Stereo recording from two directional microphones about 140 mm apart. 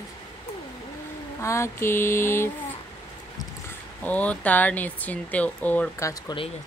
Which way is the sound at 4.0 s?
10° left (ahead or behind).